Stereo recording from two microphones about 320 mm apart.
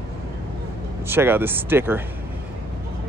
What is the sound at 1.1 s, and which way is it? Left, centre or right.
Speech, centre.